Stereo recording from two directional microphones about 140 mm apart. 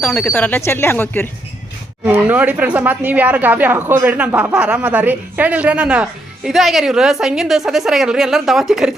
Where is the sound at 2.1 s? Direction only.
10° right (ahead or behind).